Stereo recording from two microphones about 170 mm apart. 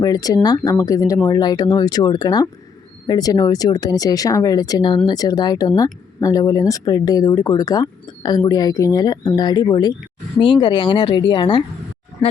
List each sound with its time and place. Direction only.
0.0 s speech: 20° left (ahead or behind)